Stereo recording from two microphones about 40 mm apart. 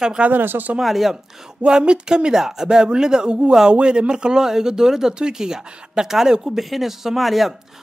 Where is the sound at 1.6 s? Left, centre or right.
Right; by 7.5 s centre.